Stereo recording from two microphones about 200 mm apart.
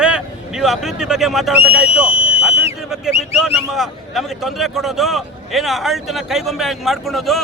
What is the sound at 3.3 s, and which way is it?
A man's voice, centre (ahead or behind).